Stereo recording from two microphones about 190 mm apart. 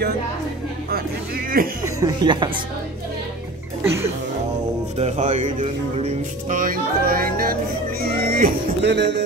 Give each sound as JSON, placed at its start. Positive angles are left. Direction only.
{"t": 1.6, "sound": "music", "side_deg": -50}
{"t": 2.0, "sound": "speech", "side_deg": -20}
{"t": 4.9, "sound": "speech", "side_deg": -35}
{"t": 8.0, "sound": "music", "side_deg": -50}